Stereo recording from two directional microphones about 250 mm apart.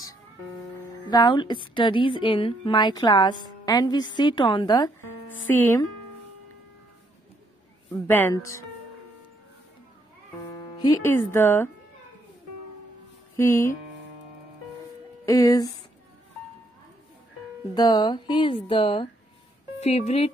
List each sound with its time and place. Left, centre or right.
1.1 s a woman's voice: centre
8.1 s a woman's voice: centre
10.8 s a woman's voice: centre
13.4 s a woman's voice: centre
15.2 s a woman's voice: centre
17.7 s speech: centre